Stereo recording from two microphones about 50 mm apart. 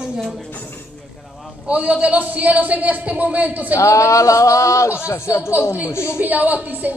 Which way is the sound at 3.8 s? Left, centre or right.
Left.